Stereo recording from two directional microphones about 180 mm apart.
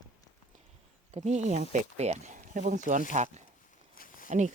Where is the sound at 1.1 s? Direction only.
40° right (ahead or behind).